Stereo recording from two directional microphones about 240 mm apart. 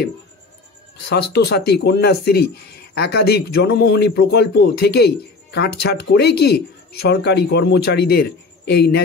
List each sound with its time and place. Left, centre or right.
1.0 s speech: left